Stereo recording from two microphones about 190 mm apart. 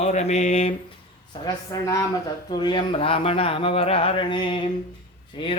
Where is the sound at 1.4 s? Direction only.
20° left (ahead or behind).